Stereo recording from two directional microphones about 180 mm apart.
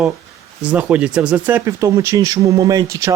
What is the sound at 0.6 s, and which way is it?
Speech, 5° right (ahead or behind).